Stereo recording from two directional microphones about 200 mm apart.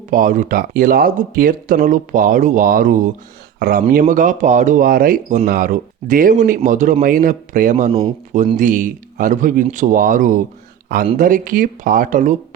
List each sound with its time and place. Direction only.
0.1 s speech: 40° right (ahead or behind)